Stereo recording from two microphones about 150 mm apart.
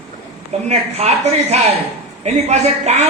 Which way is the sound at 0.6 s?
45° right (ahead or behind).